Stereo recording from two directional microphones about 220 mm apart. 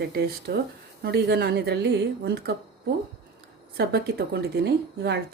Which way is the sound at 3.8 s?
45° right (ahead or behind).